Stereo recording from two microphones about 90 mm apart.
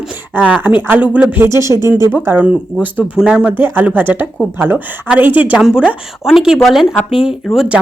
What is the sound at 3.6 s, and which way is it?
Speech, 20° right (ahead or behind).